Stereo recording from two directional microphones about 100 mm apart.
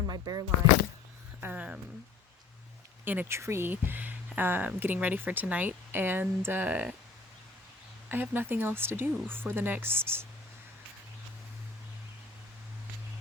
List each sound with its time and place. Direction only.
0.1 s speech: 40° right (ahead or behind)
1.4 s speech: 15° right (ahead or behind)
3.0 s speech: 20° right (ahead or behind)
8.1 s speech: 20° right (ahead or behind)